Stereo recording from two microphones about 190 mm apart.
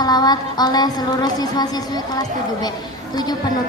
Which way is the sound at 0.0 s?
20° left (ahead or behind).